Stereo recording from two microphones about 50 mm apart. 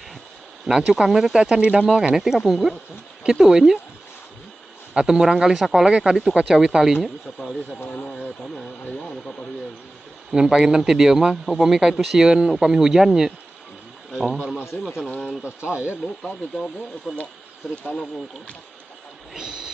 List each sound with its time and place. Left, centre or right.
0.7 s speech: centre
4.9 s speech: centre
5.9 s speech: centre
8.1 s speech: centre
10.3 s speech: centre
15.4 s speech: right
16.2 s speech: centre
19.3 s speech: centre